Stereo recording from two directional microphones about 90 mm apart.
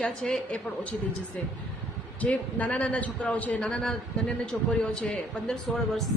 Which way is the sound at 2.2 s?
15° left (ahead or behind).